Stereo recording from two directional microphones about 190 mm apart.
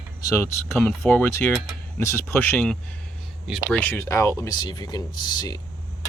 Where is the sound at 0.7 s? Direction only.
10° left (ahead or behind).